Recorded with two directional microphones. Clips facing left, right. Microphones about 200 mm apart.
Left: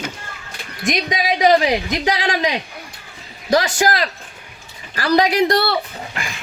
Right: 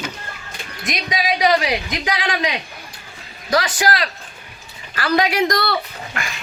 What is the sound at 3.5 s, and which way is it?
A woman's voice, 40° left (ahead or behind).